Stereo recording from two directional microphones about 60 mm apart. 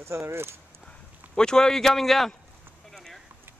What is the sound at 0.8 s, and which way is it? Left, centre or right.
Speech, centre.